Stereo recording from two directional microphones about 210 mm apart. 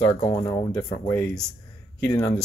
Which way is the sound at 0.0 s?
20° left (ahead or behind).